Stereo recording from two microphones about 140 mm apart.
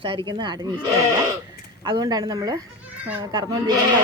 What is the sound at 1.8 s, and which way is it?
A woman's voice, 30° right (ahead or behind).